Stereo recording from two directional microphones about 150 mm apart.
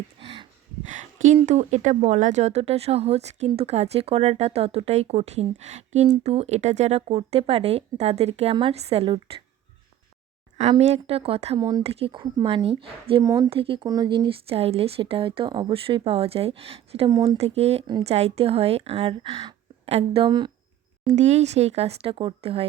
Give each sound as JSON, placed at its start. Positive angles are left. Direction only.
{"t": 0.2, "sound": "a sound", "side_deg": -40}
{"t": 0.9, "sound": "a sound", "side_deg": -55}
{"t": 1.5, "sound": "speech", "side_deg": -50}
{"t": 10.6, "sound": "speech", "side_deg": -45}
{"t": 11.5, "sound": "speech", "side_deg": -25}
{"t": 11.8, "sound": "speech", "side_deg": -40}
{"t": 13.2, "sound": "speech", "side_deg": -25}
{"t": 13.5, "sound": "speech", "side_deg": -35}
{"t": 17.1, "sound": "speech", "side_deg": -30}
{"t": 17.3, "sound": "speech", "side_deg": -45}
{"t": 20.2, "sound": "speech", "side_deg": -30}
{"t": 21.2, "sound": "speech", "side_deg": -50}